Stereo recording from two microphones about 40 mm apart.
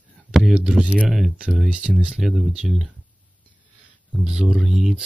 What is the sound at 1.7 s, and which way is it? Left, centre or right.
Speech, right.